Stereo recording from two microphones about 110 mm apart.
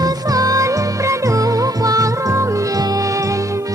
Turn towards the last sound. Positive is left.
turn(degrees=-30)  # may be behind; listen again after turning